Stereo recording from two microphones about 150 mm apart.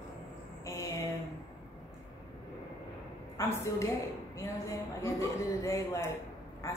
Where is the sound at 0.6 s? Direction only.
20° left (ahead or behind).